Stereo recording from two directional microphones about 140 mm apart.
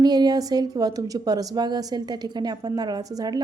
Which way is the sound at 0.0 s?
30° right (ahead or behind).